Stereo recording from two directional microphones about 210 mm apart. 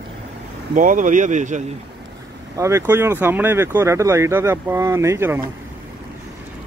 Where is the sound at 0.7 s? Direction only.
40° right (ahead or behind).